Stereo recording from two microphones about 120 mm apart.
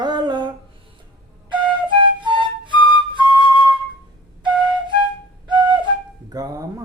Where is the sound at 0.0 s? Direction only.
35° right (ahead or behind).